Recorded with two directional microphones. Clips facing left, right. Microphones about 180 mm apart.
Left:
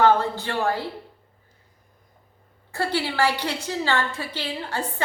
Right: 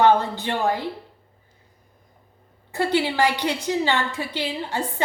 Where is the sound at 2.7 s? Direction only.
20° right (ahead or behind).